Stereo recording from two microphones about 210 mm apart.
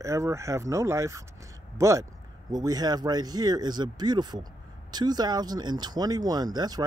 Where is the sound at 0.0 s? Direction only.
15° right (ahead or behind).